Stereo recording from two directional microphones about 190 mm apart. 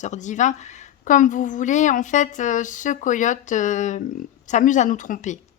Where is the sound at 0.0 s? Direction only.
40° left (ahead or behind).